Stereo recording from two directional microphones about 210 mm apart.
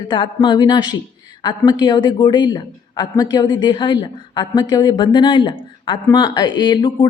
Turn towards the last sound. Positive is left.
turn(degrees=20)  # may be behind; listen again after turning